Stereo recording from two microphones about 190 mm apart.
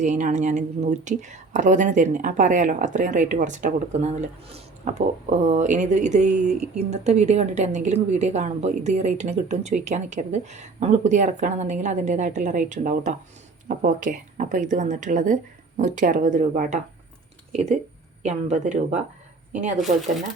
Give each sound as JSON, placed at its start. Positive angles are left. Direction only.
{"t": 0.0, "sound": "a woman's voice", "side_deg": -40}
{"t": 19.8, "sound": "speech", "side_deg": 0}